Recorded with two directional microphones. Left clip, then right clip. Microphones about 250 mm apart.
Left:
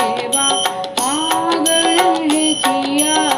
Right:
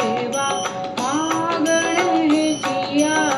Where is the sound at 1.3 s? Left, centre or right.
Left.